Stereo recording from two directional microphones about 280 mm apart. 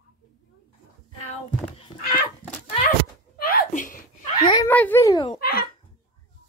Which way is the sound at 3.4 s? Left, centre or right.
Left.